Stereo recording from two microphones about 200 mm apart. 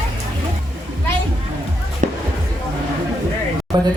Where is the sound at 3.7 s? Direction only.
20° right (ahead or behind).